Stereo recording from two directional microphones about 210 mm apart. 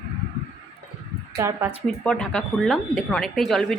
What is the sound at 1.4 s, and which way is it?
Speech, 15° right (ahead or behind).